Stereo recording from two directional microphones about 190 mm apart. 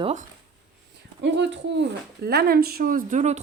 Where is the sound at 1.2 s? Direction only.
70° right (ahead or behind).